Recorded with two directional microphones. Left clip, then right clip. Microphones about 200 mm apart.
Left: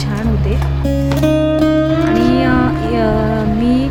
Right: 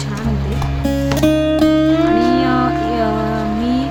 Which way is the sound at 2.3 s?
15° left (ahead or behind).